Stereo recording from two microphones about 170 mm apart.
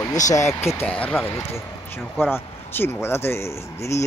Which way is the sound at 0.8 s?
5° left (ahead or behind).